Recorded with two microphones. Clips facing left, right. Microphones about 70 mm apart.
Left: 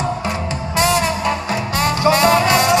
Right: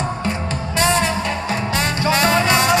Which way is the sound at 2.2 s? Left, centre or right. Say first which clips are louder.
Even; right.